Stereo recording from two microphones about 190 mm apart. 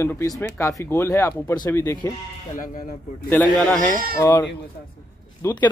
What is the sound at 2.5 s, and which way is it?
Speech, 45° left (ahead or behind).